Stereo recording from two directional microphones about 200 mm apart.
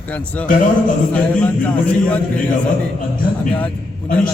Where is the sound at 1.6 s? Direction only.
5° left (ahead or behind).